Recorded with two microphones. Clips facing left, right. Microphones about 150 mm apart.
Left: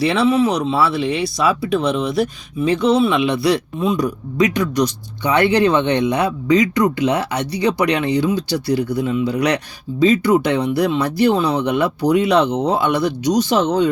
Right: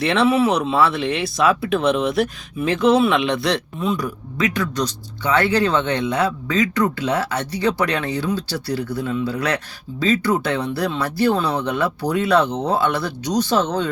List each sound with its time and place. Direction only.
0.0 s speech: centre (ahead or behind)
3.8 s speech: 20° left (ahead or behind)